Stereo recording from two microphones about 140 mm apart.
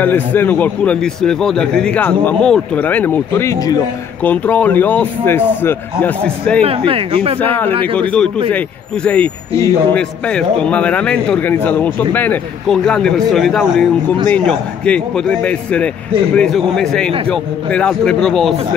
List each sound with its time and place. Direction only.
0.0 s a man's voice: 15° left (ahead or behind)
4.2 s a man's voice: 10° left (ahead or behind)
6.9 s speech: 40° right (ahead or behind)
7.3 s a man's voice: 15° left (ahead or behind)